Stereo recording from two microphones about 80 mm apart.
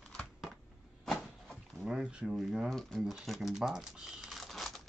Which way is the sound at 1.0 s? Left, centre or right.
Centre.